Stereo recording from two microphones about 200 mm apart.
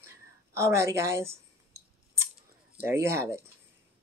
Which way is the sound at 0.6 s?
15° right (ahead or behind).